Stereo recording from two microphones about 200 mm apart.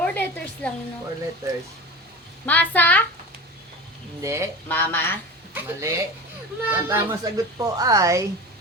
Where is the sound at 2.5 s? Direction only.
10° left (ahead or behind).